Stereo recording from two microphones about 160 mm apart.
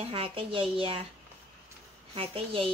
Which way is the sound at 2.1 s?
35° right (ahead or behind).